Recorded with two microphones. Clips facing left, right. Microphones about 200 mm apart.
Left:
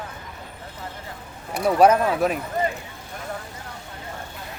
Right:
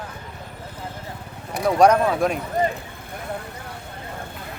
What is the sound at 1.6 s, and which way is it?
Speech, 5° left (ahead or behind).